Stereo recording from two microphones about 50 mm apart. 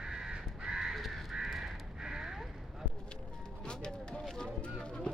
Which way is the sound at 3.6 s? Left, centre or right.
Centre.